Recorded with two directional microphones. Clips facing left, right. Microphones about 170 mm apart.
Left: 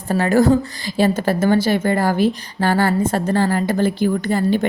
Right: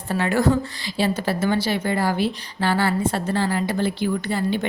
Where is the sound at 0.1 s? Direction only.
40° left (ahead or behind).